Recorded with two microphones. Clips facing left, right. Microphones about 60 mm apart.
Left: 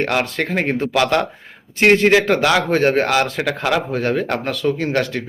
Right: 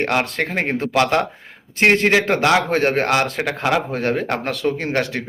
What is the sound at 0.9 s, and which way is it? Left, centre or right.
Speech, right.